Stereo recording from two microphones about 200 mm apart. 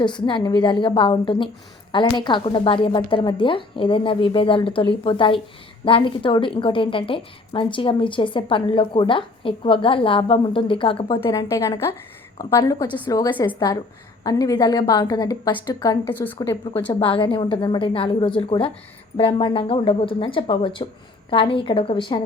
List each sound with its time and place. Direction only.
0.0 s a woman's voice: 25° left (ahead or behind)
11.1 s a woman's voice: 15° left (ahead or behind)
17.0 s a woman's voice: 25° left (ahead or behind)